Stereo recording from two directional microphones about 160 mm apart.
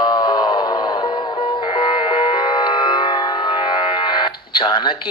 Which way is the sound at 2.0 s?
30° left (ahead or behind).